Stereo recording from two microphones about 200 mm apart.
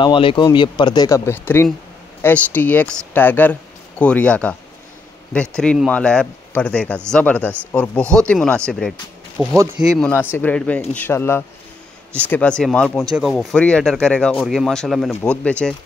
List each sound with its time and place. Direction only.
0.0 s speech: 25° left (ahead or behind); by 15.7 s 5° left (ahead or behind)